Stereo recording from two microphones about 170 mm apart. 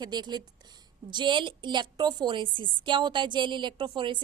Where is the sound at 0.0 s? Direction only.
25° right (ahead or behind).